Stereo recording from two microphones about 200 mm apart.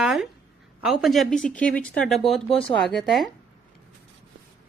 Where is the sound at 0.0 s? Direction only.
Centre (ahead or behind).